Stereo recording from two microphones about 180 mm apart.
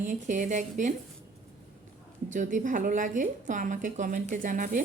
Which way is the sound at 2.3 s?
45° right (ahead or behind).